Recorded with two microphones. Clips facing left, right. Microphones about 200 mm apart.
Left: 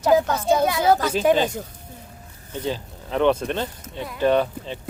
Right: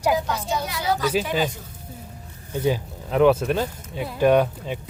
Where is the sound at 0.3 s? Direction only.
55° left (ahead or behind).